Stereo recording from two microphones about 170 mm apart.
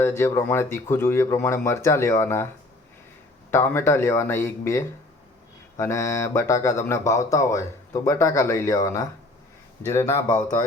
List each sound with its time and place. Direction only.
0.0 s speech: 15° left (ahead or behind)
3.5 s speech: 15° left (ahead or behind)